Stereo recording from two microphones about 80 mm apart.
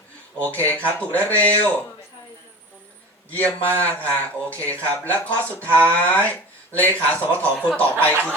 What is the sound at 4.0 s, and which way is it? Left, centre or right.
Speech, centre.